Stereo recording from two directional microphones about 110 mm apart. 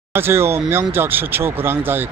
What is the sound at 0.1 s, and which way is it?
Speech, 20° right (ahead or behind).